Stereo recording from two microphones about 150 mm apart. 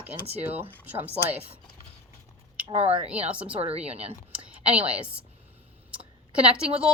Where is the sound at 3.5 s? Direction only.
45° right (ahead or behind).